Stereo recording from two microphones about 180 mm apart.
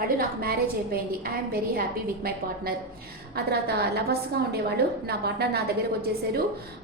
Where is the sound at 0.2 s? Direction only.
55° right (ahead or behind).